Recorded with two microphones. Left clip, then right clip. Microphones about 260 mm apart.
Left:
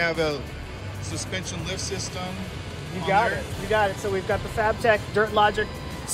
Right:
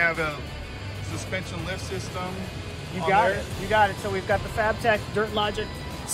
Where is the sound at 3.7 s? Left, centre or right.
Left.